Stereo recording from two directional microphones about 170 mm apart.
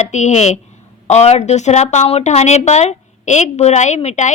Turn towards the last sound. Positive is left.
turn(degrees=40)  # may be behind; listen again after turning